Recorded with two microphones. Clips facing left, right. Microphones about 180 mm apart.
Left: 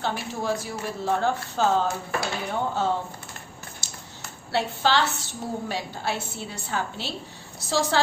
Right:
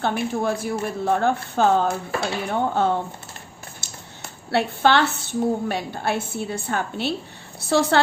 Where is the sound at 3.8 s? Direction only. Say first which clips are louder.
Right 1 dB; 60° right (ahead or behind).